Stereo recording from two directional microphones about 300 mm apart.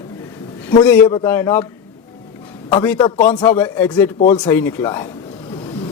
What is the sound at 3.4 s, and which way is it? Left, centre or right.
A man's voice, centre.